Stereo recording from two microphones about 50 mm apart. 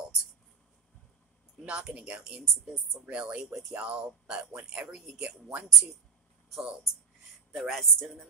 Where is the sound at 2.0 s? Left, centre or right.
Right.